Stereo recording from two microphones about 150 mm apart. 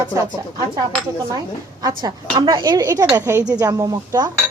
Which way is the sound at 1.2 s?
25° right (ahead or behind).